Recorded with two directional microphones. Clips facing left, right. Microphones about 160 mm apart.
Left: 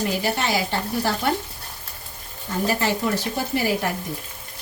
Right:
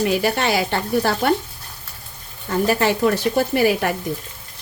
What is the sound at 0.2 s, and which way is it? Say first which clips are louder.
Speech: right 4 dB; 65° right (ahead or behind).